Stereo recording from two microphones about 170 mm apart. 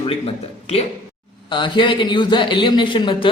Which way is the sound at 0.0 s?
35° left (ahead or behind).